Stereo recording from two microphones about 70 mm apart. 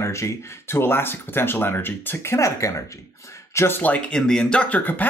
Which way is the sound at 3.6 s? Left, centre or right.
Left.